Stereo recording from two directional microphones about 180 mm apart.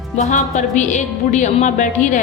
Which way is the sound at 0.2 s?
40° left (ahead or behind).